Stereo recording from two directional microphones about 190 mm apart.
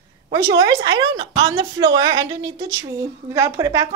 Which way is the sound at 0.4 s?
55° right (ahead or behind).